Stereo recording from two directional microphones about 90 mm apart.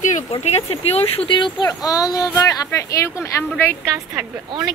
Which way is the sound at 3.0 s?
30° left (ahead or behind).